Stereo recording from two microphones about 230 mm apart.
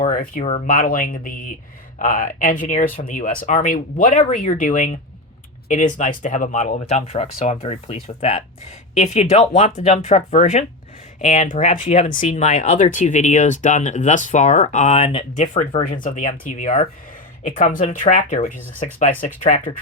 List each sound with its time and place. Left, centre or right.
0.0 s speech: left